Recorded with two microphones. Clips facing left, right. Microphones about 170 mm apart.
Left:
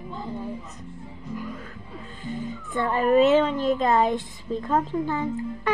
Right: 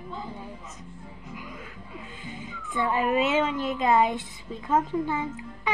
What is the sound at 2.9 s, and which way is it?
A woman's voice, 40° left (ahead or behind).